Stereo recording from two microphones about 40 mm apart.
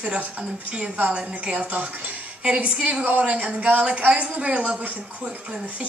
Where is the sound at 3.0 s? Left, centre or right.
Right.